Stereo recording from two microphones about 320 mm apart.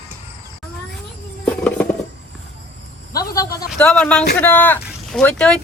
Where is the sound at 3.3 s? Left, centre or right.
Centre.